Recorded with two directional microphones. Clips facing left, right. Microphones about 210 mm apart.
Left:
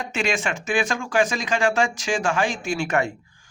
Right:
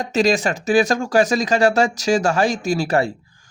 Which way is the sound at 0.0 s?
40° right (ahead or behind).